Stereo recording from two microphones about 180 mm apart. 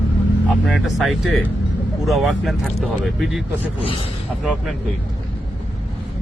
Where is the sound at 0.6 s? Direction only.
Centre (ahead or behind).